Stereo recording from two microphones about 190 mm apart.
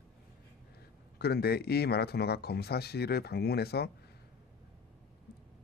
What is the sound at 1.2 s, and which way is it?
A man's voice, 55° left (ahead or behind).